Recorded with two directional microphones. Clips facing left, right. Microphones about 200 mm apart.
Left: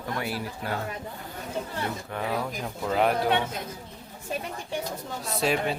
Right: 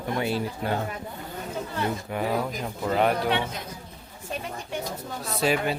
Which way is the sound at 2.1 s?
5° right (ahead or behind).